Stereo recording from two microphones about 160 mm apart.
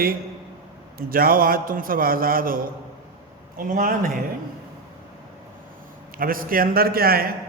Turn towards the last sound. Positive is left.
turn(degrees=-70)  # may be behind; listen again after turning